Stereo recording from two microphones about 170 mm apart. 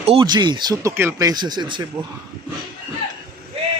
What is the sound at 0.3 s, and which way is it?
Speech, 25° right (ahead or behind).